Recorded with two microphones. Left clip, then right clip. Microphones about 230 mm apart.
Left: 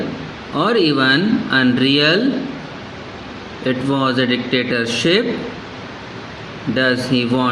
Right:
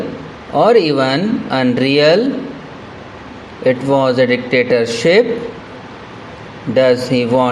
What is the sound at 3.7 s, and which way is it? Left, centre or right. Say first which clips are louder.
Speech: right 6 dB; right.